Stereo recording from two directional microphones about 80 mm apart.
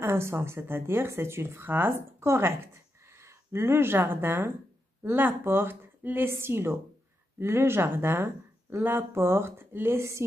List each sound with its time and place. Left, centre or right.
0.0 s a woman's voice: right